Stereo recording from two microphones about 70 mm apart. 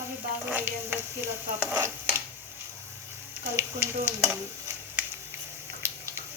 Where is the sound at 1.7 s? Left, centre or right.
Right.